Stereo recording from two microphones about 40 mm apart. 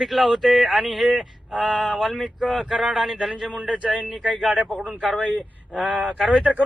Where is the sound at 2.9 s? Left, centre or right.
Centre.